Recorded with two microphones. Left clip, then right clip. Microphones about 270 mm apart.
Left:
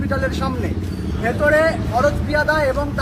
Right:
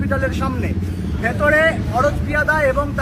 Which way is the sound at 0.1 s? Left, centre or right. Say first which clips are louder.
Right 1 dB; centre.